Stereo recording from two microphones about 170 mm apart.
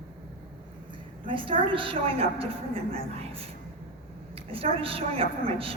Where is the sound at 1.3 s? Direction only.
30° right (ahead or behind).